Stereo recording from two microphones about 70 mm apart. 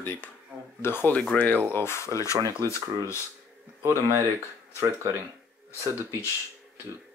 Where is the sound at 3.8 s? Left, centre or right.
Right.